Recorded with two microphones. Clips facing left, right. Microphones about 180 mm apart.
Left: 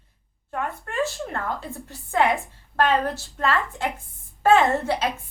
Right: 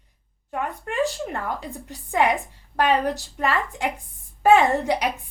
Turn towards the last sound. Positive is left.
turn(degrees=-15)  # may be behind; listen again after turning